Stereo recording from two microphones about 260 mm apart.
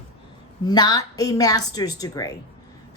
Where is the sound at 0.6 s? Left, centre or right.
Centre.